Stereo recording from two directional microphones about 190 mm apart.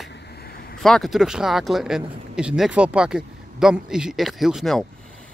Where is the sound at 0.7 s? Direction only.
Centre (ahead or behind).